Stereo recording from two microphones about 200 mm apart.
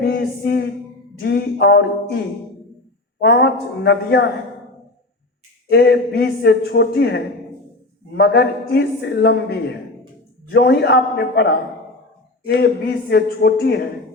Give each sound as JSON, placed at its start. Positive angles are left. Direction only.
{"t": 0.0, "sound": "a sound", "side_deg": 55}
{"t": 1.2, "sound": "a man's voice", "side_deg": 55}
{"t": 5.6, "sound": "a man's voice", "side_deg": 55}